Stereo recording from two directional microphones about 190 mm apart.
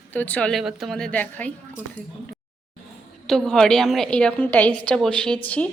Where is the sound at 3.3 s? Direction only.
Centre (ahead or behind).